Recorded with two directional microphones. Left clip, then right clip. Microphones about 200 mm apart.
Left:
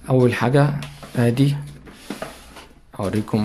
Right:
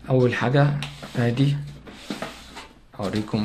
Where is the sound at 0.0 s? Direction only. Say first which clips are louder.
Left 3 dB; 35° left (ahead or behind).